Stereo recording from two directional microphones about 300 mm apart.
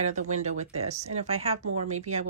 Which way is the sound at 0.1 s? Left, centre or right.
Right.